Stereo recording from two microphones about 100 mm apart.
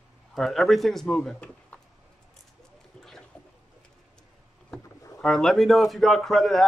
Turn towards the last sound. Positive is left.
turn(degrees=0)  # may be behind; listen again after turning